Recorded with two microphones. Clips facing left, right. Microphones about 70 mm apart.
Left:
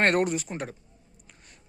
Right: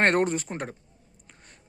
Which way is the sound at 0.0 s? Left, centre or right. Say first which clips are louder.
Right 1 dB; right.